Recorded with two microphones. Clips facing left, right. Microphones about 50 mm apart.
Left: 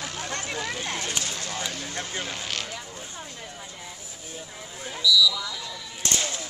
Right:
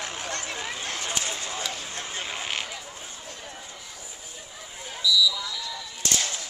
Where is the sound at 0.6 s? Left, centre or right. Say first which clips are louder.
Left 2 dB; centre.